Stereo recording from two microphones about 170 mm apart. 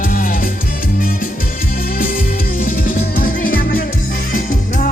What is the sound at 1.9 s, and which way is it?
Music, 55° left (ahead or behind).